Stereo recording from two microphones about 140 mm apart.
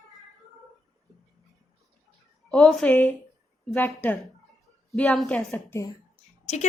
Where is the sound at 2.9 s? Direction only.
15° left (ahead or behind).